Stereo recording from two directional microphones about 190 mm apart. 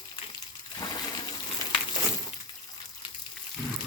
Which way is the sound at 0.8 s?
20° left (ahead or behind).